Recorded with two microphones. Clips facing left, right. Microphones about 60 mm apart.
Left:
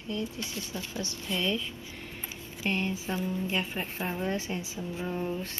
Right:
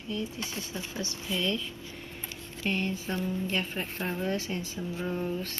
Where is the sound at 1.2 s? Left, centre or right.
Centre.